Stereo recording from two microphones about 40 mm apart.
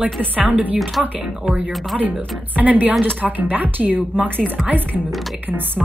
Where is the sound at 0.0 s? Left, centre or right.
Right.